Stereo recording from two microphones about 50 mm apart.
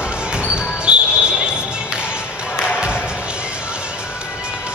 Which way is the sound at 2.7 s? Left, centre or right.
Centre.